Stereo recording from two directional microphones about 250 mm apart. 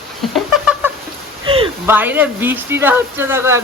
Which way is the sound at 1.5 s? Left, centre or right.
Right.